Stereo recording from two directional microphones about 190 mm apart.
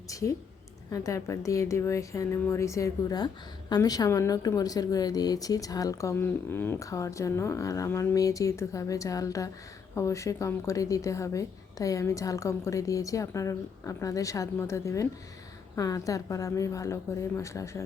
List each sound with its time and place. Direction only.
0.1 s speech: 15° left (ahead or behind)